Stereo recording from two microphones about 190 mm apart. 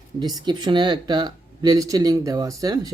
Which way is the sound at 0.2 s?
20° right (ahead or behind).